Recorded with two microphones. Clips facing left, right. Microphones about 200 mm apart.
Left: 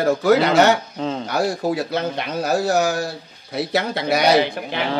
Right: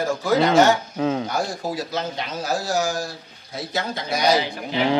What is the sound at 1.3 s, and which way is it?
Speech, 65° left (ahead or behind).